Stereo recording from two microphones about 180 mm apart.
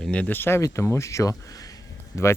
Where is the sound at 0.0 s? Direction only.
5° left (ahead or behind).